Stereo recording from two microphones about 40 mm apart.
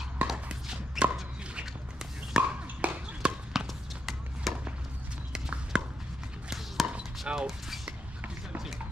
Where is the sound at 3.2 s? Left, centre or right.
Right.